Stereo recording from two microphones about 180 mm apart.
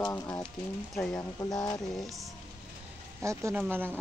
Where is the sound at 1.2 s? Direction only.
20° left (ahead or behind).